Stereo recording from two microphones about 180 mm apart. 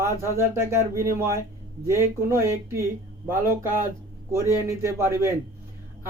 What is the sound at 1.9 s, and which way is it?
Speech, 15° right (ahead or behind).